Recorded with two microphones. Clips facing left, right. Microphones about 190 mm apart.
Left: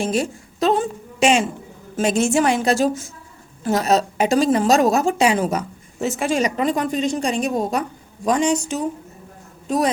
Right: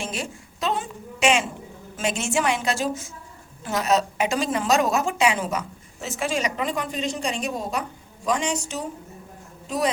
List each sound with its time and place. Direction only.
0.0 s a woman's voice: 40° left (ahead or behind)